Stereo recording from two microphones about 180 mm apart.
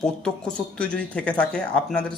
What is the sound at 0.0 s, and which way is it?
Speech, 5° left (ahead or behind).